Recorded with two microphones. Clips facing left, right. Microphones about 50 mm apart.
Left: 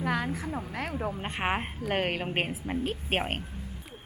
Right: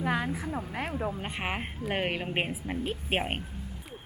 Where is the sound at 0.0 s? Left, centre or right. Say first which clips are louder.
Even; centre.